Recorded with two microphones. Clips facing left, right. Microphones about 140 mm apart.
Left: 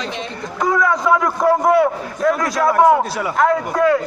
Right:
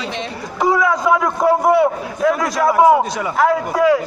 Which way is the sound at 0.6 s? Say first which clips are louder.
Right 1 dB; 5° right (ahead or behind).